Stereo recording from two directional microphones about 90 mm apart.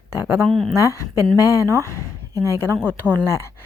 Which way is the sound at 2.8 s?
10° right (ahead or behind).